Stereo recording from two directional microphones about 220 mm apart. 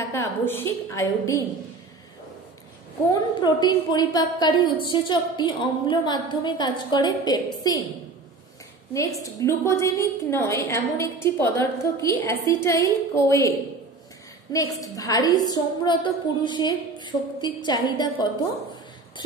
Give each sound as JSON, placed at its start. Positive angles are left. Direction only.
{"t": 0.1, "sound": "a woman's voice", "side_deg": 10}
{"t": 3.3, "sound": "a woman's voice", "side_deg": 20}
{"t": 9.2, "sound": "a woman's voice", "side_deg": 15}